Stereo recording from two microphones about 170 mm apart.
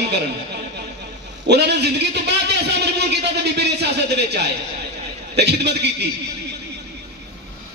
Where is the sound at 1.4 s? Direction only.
85° right.